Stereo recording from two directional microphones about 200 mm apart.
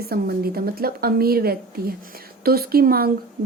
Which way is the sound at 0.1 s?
50° right (ahead or behind).